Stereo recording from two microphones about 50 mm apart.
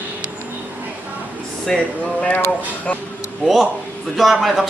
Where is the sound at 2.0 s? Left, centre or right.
Left.